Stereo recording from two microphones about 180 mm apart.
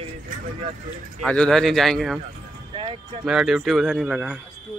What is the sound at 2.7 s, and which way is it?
Music, 30° right (ahead or behind).